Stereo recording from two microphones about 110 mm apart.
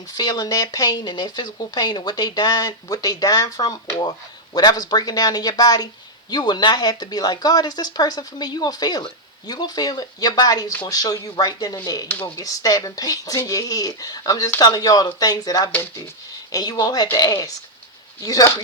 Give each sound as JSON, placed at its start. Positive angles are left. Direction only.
{"t": 0.1, "sound": "speech", "side_deg": 40}